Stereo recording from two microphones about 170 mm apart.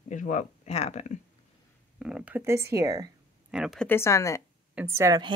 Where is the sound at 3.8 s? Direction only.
15° left (ahead or behind).